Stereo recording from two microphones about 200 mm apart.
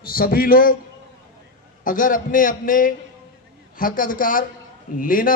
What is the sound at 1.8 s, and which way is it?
A man's voice, 40° left (ahead or behind).